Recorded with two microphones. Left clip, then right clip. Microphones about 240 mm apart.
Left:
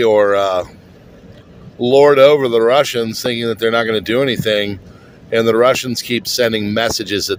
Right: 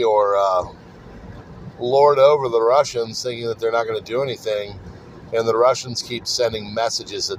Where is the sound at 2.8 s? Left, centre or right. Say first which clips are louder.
Left 4 dB; left.